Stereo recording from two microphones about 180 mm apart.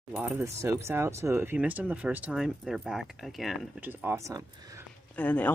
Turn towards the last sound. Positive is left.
turn(degrees=10)  # may be behind; listen again after turning